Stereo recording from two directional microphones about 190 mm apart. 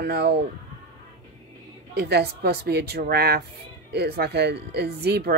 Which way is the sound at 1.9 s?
60° right (ahead or behind).